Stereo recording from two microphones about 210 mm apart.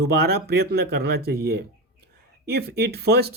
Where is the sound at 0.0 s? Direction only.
50° right (ahead or behind).